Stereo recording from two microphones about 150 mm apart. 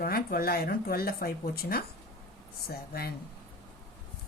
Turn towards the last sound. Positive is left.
turn(degrees=90)